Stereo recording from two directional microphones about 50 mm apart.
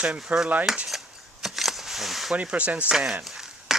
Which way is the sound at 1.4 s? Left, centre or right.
Centre.